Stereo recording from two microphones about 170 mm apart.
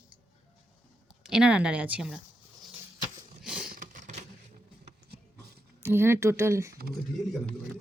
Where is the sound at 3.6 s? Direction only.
55° right (ahead or behind).